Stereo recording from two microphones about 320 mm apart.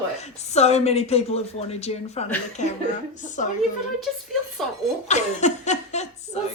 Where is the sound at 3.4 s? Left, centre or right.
Left.